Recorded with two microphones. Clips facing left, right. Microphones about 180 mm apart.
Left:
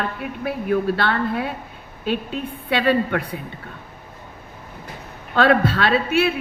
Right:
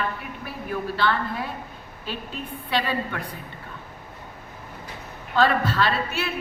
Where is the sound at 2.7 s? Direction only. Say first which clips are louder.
Left 7 dB; 65° left (ahead or behind).